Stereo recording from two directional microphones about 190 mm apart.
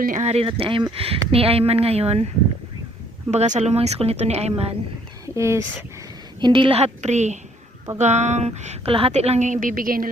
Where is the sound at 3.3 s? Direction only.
35° right (ahead or behind).